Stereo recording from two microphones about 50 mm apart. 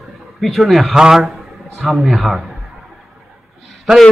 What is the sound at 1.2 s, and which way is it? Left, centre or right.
Speech, centre.